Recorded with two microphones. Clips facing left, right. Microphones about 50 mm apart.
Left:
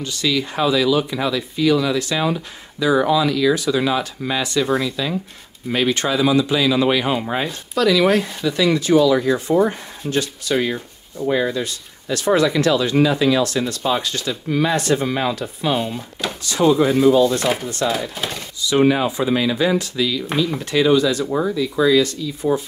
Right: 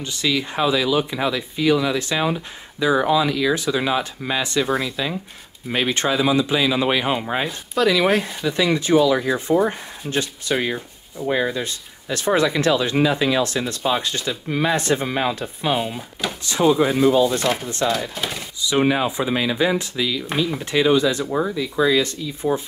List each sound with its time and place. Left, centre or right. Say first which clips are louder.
0.0 s speech: left 1 dB; right
4.6 s speech: left 2 dB; centre
5.7 s speech: left 2 dB; right
7.8 s speech: left 2 dB; right
9.7 s speech: left 2 dB; right
10.7 s speech: left 1 dB; centre
11.6 s speech: left 2 dB; right
15.7 s speech: even; centre
17.4 s speech: left 1 dB; centre
18.7 s speech: left 3 dB; centre
20.7 s speech: left 2 dB; right
21.3 s speech: left 2 dB; centre
21.7 s speech: left 2 dB; centre
22.0 s speech: left 2 dB; right